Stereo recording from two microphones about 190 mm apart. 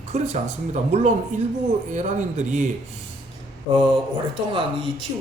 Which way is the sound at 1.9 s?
40° right (ahead or behind).